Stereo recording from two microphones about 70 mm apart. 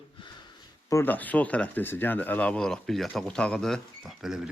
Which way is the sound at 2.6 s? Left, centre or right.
Centre.